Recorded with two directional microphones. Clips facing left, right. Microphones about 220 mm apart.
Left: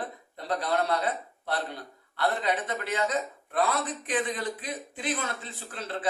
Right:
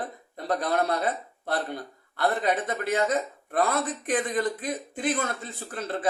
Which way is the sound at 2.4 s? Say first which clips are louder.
Right 3 dB; 45° right (ahead or behind).